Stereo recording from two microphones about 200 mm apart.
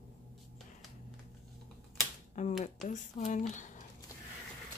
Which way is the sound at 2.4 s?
35° left (ahead or behind).